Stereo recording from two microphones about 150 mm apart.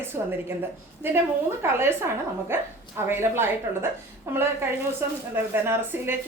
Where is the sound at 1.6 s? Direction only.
15° right (ahead or behind).